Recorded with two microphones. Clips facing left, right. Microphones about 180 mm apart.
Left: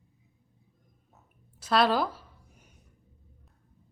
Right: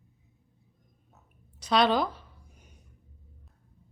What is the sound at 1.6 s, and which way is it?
Speech, 5° left (ahead or behind).